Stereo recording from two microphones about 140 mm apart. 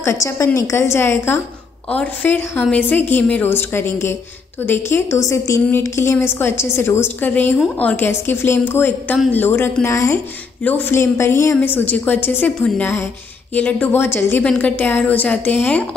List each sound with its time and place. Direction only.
0.0 s a woman's voice: 20° left (ahead or behind)